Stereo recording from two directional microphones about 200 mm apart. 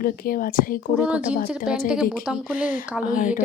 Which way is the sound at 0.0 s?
45° left (ahead or behind).